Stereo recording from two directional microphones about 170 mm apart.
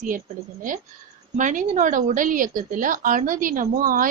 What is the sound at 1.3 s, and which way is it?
Speech, 50° right (ahead or behind).